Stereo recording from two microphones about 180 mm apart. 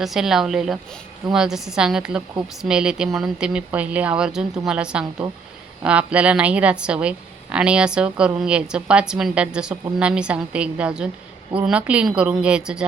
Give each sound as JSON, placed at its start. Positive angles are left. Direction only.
{"t": 0.0, "sound": "a woman's voice", "side_deg": 0}